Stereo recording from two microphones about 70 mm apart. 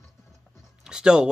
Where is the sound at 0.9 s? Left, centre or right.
Centre.